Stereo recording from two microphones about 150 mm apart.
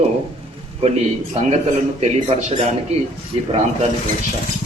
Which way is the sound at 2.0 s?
45° right (ahead or behind).